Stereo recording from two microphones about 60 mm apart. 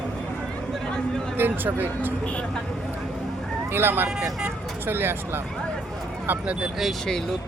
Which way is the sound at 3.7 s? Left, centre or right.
Right.